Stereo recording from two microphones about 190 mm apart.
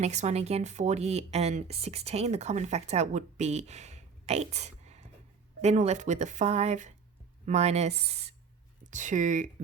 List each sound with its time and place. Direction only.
0.0 s a woman's voice: 35° right (ahead or behind)